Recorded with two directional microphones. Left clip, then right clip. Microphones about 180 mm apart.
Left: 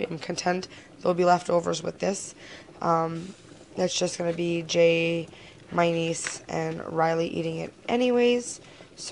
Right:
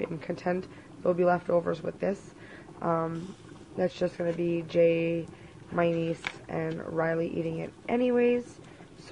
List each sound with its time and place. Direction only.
0.0 s speech: 30° left (ahead or behind)